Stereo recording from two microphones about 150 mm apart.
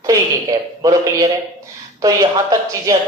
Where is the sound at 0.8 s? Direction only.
25° right (ahead or behind).